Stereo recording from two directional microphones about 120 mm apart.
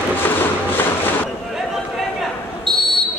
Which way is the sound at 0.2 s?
15° left (ahead or behind).